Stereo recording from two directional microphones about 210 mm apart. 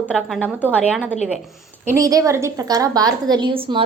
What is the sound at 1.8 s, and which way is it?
A woman's voice, 15° right (ahead or behind).